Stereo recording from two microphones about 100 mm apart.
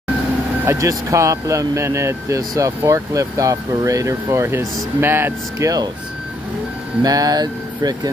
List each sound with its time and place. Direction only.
0.7 s speech: 30° right (ahead or behind)
7.0 s speech: 40° right (ahead or behind)